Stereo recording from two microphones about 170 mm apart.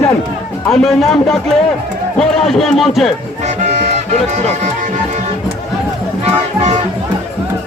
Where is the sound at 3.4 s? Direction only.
45° right (ahead or behind).